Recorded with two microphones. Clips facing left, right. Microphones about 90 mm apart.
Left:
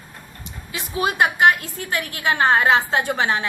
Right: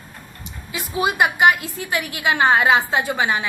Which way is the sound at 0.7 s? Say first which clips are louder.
Right 1 dB; 5° right (ahead or behind).